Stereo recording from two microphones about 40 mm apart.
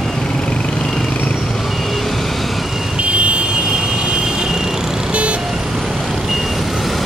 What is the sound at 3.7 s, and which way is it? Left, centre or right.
Vehicle, centre.